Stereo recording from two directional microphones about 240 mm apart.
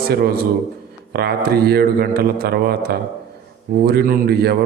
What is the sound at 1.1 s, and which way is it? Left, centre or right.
A man's voice, right.